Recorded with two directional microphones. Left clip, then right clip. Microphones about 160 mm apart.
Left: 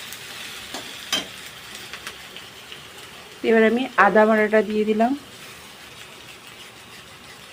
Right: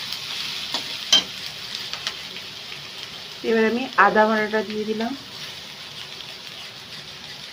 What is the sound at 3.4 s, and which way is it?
Speech, 35° left (ahead or behind).